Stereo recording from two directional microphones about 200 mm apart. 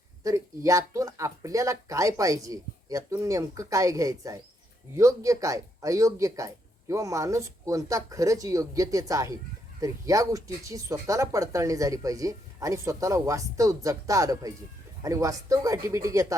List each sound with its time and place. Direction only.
0.2 s speech: 15° right (ahead or behind)